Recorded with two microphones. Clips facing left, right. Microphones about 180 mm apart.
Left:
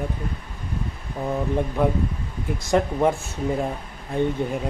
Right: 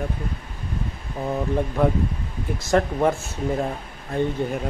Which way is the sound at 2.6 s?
15° left (ahead or behind).